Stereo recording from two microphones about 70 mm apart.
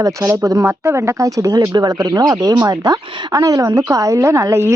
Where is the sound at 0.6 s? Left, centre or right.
Right.